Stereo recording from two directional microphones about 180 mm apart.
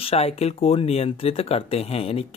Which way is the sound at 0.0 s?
35° left (ahead or behind).